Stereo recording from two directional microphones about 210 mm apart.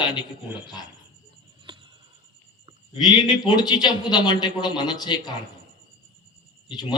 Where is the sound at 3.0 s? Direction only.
20° left (ahead or behind).